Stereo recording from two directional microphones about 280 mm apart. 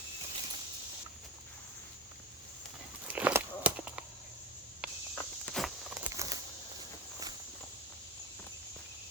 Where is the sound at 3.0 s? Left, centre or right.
Centre.